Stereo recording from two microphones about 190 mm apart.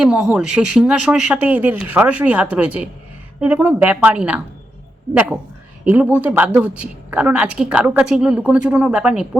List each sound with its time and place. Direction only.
0.0 s a woman's voice: 5° right (ahead or behind)